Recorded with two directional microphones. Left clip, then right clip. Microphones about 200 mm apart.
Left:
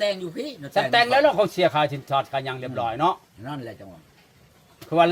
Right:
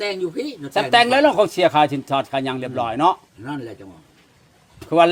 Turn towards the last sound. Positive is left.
turn(degrees=-35)  # may be behind; listen again after turning